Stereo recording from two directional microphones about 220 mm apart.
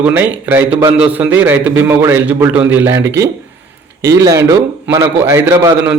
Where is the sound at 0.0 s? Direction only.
10° right (ahead or behind).